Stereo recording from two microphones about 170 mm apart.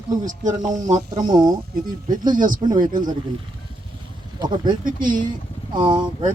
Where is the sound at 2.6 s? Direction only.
35° right (ahead or behind).